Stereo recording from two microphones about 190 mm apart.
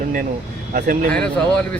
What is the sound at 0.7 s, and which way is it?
Speech, 45° right (ahead or behind).